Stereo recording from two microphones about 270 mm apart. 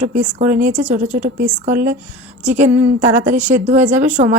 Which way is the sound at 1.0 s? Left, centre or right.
Centre.